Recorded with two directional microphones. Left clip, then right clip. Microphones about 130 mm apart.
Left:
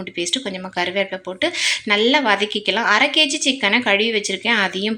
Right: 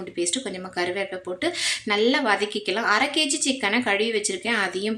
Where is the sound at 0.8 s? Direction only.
20° left (ahead or behind).